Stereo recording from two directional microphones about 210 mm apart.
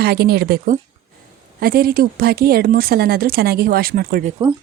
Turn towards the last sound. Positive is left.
turn(degrees=-45)  # may be behind; listen again after turning